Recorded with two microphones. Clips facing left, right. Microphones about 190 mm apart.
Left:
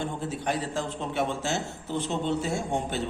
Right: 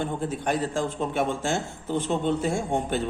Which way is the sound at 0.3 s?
50° right (ahead or behind).